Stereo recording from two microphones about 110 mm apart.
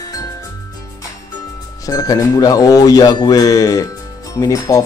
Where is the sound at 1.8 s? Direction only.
30° left (ahead or behind).